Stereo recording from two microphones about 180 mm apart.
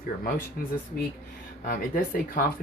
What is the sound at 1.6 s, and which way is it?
Speech, 50° left (ahead or behind).